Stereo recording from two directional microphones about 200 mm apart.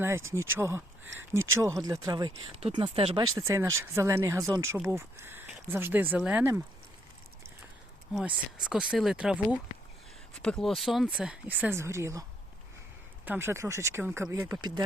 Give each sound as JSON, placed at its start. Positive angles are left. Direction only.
{"t": 0.0, "sound": "speech", "side_deg": -10}
{"t": 3.3, "sound": "speech", "side_deg": -15}
{"t": 8.1, "sound": "speech", "side_deg": -5}
{"t": 13.2, "sound": "speech", "side_deg": -10}